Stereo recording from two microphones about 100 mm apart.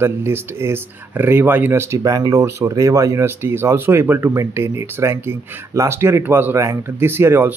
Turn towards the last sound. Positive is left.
turn(degrees=-20)  # may be behind; listen again after turning